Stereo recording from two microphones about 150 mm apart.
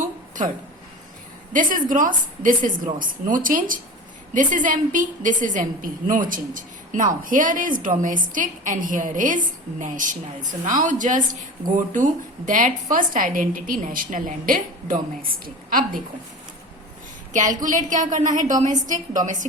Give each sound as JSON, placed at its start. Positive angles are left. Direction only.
{"t": 0.0, "sound": "a sound", "side_deg": -60}
{"t": 1.5, "sound": "a woman's voice", "side_deg": -65}
{"t": 17.3, "sound": "a woman's voice", "side_deg": -60}